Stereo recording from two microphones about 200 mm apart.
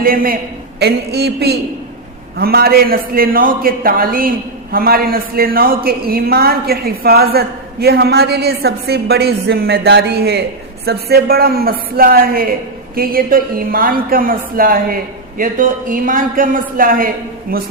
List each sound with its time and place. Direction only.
0.0 s a man's voice: 45° right (ahead or behind)